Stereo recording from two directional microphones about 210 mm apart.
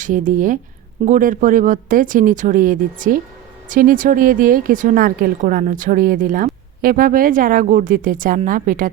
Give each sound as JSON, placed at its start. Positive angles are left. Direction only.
{"t": 0.0, "sound": "speech", "side_deg": -40}